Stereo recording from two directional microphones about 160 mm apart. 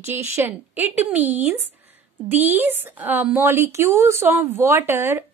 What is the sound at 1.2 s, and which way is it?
Speech, 45° right (ahead or behind).